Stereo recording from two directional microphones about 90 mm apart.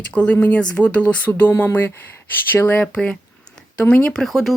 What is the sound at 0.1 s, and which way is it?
Speech, 15° left (ahead or behind).